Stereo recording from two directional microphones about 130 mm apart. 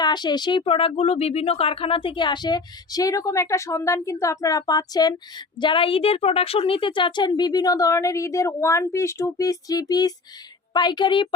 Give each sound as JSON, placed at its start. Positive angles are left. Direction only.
{"t": 0.0, "sound": "a woman's voice", "side_deg": 35}